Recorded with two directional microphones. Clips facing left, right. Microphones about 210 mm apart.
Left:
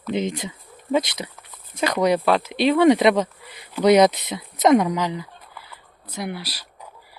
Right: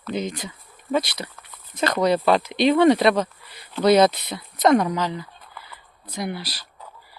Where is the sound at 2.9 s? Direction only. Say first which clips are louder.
Left 1 dB; 20° left (ahead or behind).